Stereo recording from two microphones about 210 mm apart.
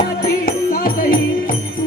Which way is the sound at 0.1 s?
45° left (ahead or behind).